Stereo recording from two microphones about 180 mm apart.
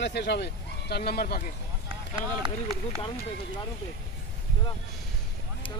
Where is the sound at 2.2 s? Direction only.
25° right (ahead or behind).